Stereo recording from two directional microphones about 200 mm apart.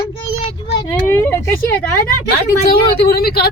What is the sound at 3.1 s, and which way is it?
Speech, 50° left (ahead or behind).